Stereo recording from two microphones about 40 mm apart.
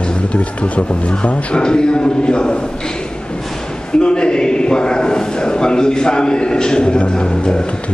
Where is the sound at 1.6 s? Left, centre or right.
Left.